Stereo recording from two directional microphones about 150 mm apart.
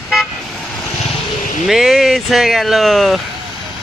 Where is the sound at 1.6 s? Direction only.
Centre (ahead or behind).